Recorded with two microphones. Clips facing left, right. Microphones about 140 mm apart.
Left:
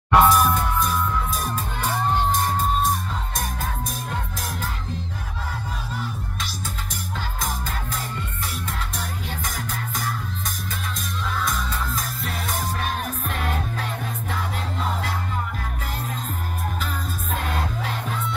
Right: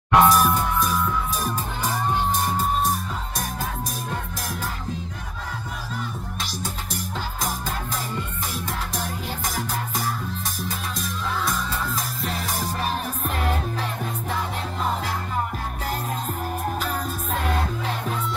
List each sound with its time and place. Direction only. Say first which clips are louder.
0.1 s music: even; centre (ahead or behind)
16.8 s music: right 3 dB; 40° right (ahead or behind)